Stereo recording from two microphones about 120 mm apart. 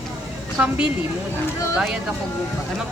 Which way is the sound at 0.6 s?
10° right (ahead or behind).